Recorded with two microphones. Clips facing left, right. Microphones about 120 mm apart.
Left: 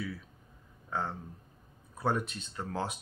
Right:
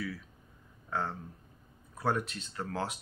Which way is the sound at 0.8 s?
20° left (ahead or behind).